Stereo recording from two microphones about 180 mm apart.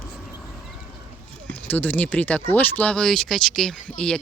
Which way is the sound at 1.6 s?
10° left (ahead or behind).